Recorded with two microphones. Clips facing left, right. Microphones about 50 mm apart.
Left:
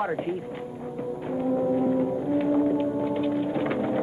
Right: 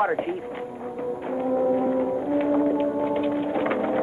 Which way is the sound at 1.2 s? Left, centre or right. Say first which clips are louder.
Right 2 dB; centre.